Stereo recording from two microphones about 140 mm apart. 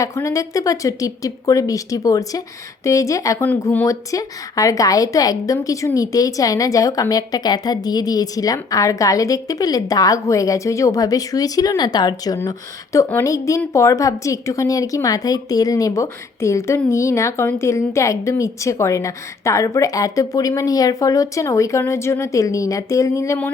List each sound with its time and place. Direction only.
0.0 s a woman's voice: 20° left (ahead or behind)
3.5 s speech: 10° left (ahead or behind)
3.8 s a woman's voice: 25° left (ahead or behind)